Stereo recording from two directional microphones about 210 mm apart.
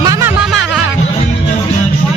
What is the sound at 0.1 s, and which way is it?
Music, 10° right (ahead or behind).